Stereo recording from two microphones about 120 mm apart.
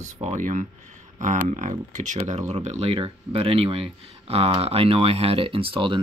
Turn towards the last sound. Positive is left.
turn(degrees=-45)  # may be behind; listen again after turning